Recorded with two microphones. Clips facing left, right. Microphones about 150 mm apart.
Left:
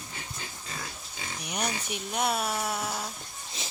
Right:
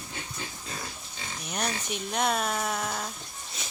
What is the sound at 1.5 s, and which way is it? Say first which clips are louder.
Speech: right 1 dB; 10° left (ahead or behind).